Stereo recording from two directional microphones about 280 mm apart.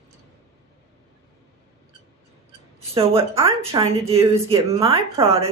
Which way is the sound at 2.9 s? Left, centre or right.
Centre.